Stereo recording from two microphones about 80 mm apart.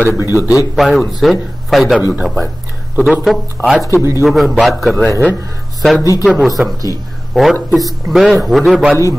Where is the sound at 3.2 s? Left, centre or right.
Centre.